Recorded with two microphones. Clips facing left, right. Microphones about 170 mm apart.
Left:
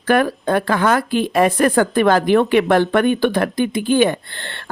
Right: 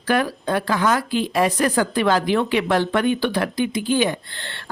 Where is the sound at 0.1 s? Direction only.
55° left (ahead or behind).